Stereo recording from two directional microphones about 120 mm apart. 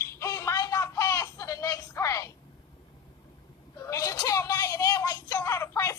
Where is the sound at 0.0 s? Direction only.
25° left (ahead or behind).